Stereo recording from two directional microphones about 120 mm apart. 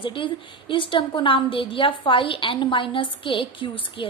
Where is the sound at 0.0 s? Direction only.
45° left (ahead or behind).